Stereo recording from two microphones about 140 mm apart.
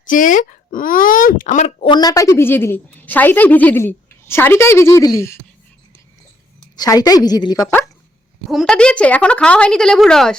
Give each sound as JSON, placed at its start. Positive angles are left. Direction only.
{"t": 0.0, "sound": "speech", "side_deg": 70}
{"t": 1.8, "sound": "a woman's voice", "side_deg": 30}
{"t": 6.6, "sound": "a woman's voice", "side_deg": 25}
{"t": 8.4, "sound": "a woman's voice", "side_deg": 0}